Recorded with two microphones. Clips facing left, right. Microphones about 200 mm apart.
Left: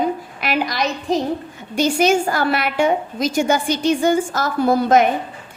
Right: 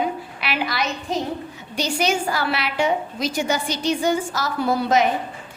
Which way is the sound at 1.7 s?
50° left (ahead or behind).